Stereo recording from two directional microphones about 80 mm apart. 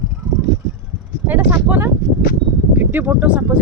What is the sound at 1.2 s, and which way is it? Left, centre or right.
Speech, right.